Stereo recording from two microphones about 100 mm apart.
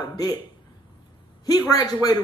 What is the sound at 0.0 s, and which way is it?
Speech, 45° left (ahead or behind).